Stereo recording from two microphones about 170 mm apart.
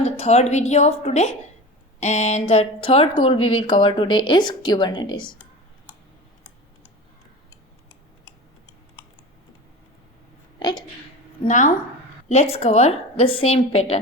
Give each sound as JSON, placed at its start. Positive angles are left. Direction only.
{"t": 0.0, "sound": "speech", "side_deg": 40}
{"t": 10.6, "sound": "speech", "side_deg": 25}
{"t": 11.4, "sound": "speech", "side_deg": 45}
{"t": 12.3, "sound": "speech", "side_deg": 35}